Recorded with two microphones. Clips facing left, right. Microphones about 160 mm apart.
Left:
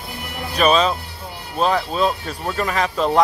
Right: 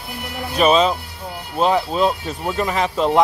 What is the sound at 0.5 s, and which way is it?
Speech, 20° right (ahead or behind).